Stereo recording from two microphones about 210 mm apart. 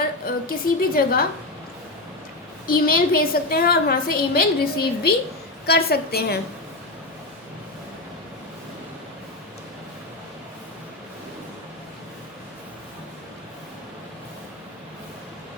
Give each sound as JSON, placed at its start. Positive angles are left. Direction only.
{"t": 0.4, "sound": "a woman's voice", "side_deg": 45}
{"t": 2.6, "sound": "a woman's voice", "side_deg": 45}